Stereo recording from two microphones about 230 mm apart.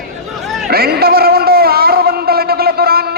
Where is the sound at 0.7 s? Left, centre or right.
Right.